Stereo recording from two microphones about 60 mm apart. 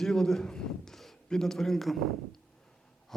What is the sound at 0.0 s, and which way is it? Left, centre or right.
A man's voice, centre.